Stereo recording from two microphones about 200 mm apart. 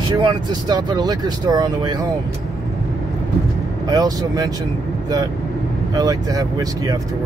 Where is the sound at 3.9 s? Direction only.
20° right (ahead or behind).